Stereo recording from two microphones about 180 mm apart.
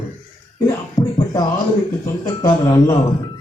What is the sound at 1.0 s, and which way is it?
Music, 20° left (ahead or behind).